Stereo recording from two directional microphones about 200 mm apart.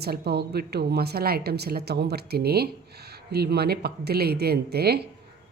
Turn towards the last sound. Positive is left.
turn(degrees=-55)  # may be behind; listen again after turning